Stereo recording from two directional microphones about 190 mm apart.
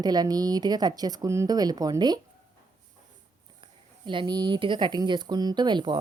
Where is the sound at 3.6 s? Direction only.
25° right (ahead or behind).